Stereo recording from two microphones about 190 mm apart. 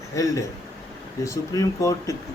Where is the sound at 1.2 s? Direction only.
15° left (ahead or behind).